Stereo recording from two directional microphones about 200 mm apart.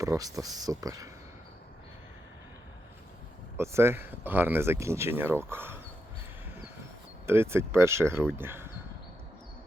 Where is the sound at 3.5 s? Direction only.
15° right (ahead or behind).